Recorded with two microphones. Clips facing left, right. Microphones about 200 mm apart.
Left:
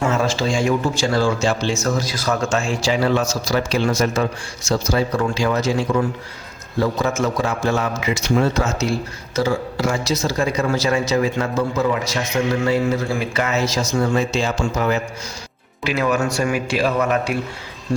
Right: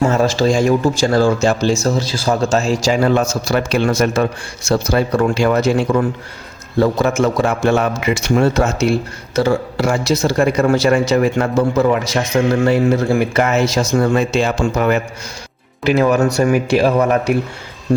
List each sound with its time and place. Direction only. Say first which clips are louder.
0.1 s a man's voice: right 5 dB; 40° right (ahead or behind)
1.8 s a man's voice: right 4 dB; 30° right (ahead or behind); by 15.0 s 60° right (ahead or behind)
15.9 s a man's voice: right 6 dB; 40° right (ahead or behind)